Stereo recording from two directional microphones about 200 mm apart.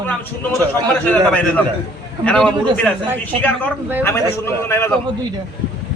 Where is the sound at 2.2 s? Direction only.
5° left (ahead or behind).